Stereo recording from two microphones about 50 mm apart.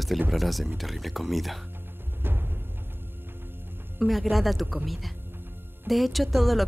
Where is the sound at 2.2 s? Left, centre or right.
Right.